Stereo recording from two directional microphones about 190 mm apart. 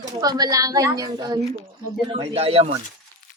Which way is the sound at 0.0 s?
20° right (ahead or behind).